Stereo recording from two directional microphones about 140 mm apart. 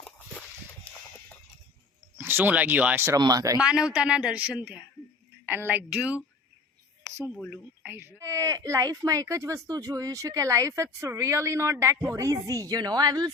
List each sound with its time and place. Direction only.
2.1 s speech: 15° right (ahead or behind)
3.2 s speech: 25° right (ahead or behind)
3.6 s a woman's voice: 5° right (ahead or behind)
7.5 s speech: 15° right (ahead or behind)